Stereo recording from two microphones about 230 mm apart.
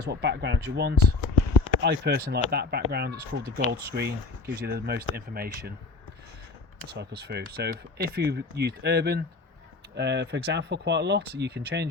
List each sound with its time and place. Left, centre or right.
0.1 s speech: right
6.8 s speech: right